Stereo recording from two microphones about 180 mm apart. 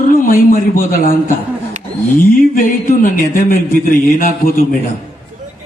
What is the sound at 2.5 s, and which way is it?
Speech, 50° left (ahead or behind).